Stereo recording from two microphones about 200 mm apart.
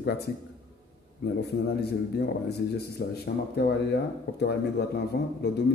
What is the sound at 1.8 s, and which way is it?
Speech, 55° left (ahead or behind).